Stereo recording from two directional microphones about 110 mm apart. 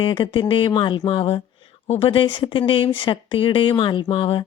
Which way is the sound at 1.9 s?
55° left (ahead or behind).